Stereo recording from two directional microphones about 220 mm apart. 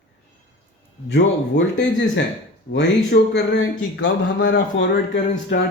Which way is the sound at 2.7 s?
50° left (ahead or behind).